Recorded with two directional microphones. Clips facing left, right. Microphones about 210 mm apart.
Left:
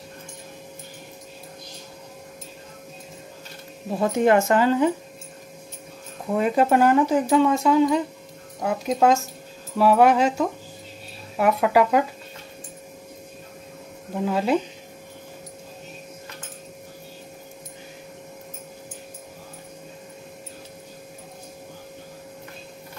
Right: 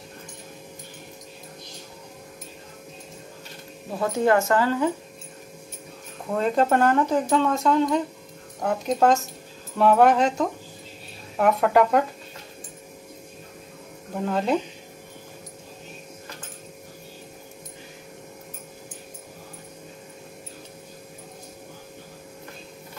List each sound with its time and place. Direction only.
4.0 s speech: 20° left (ahead or behind)
6.3 s speech: 10° left (ahead or behind)
14.1 s speech: 5° left (ahead or behind)